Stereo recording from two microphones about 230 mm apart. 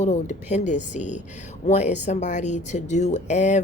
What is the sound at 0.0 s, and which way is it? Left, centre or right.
Speech, left.